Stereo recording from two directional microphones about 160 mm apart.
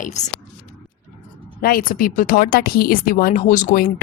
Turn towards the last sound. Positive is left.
turn(degrees=60)  # may be behind; listen again after turning